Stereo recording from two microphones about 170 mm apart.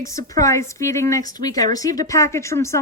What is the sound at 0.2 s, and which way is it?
A woman's voice, 20° left (ahead or behind).